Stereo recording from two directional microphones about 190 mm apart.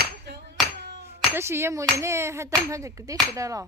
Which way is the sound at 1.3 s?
15° right (ahead or behind).